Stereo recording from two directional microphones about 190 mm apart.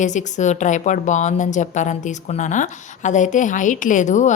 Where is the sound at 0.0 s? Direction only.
40° left (ahead or behind).